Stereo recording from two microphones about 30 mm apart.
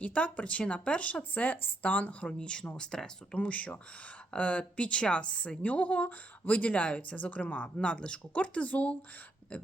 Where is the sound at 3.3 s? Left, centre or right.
Left.